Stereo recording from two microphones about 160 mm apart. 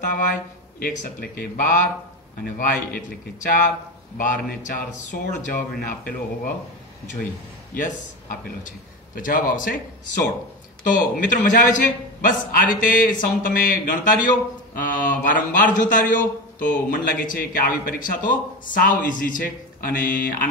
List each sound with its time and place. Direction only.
0.7 s a man's voice: 70° left (ahead or behind)
7.7 s speech: 55° left (ahead or behind)
10.8 s a man's voice: 55° left (ahead or behind)